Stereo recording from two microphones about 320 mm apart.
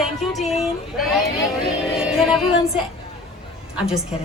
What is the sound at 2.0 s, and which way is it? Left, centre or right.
Music, centre.